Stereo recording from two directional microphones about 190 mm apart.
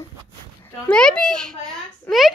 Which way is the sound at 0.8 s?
5° left (ahead or behind).